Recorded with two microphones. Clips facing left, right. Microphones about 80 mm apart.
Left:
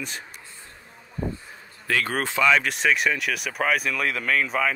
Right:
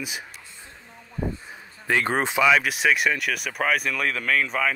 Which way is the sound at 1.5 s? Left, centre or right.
Right.